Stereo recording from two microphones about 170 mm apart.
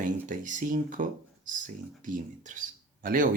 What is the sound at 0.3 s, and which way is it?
Speech, 50° right (ahead or behind).